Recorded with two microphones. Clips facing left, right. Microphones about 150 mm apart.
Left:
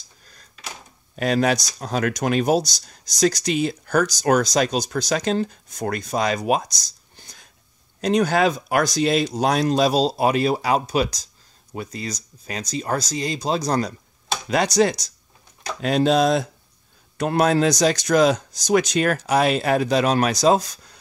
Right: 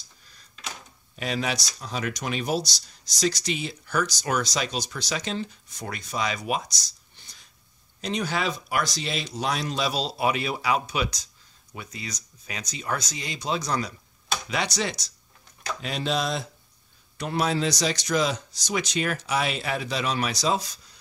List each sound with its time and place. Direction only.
1.1 s speech: 45° left (ahead or behind)